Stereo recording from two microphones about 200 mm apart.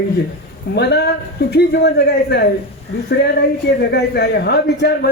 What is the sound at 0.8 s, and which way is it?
A man's voice, 55° left (ahead or behind).